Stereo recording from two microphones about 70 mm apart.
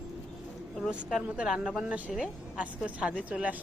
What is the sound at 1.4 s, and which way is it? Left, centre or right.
A woman's voice, centre.